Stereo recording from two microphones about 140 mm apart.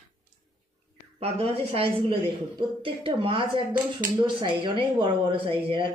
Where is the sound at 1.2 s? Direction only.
45° right (ahead or behind).